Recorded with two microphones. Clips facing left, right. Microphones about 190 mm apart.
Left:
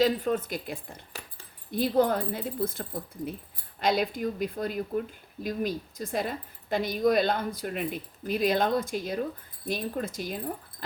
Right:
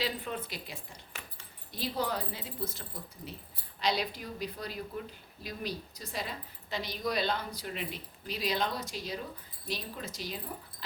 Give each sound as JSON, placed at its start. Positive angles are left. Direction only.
{"t": 0.0, "sound": "speech", "side_deg": 45}